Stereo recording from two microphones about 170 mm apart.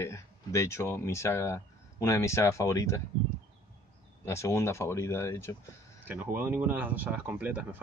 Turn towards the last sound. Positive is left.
turn(degrees=-10)  # may be behind; listen again after turning